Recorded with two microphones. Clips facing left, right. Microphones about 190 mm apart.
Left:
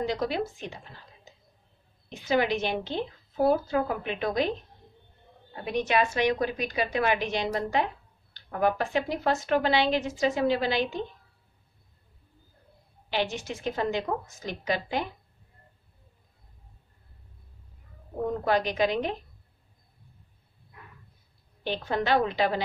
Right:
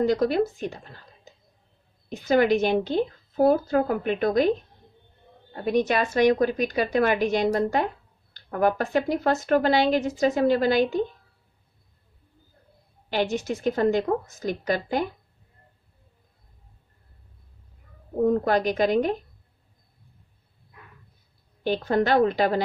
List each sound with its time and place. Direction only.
0.0 s a woman's voice: 45° right (ahead or behind)
2.0 s a woman's voice: 45° right (ahead or behind)
5.5 s a woman's voice: 45° right (ahead or behind)
13.1 s a woman's voice: 45° right (ahead or behind)
18.2 s a woman's voice: 45° right (ahead or behind)
21.6 s a woman's voice: 45° right (ahead or behind)